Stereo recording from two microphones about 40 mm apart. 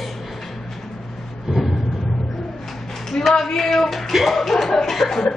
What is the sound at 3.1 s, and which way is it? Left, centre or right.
A man's voice, centre.